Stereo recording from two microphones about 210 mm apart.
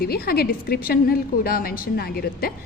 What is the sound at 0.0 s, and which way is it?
A woman's voice, 45° left (ahead or behind).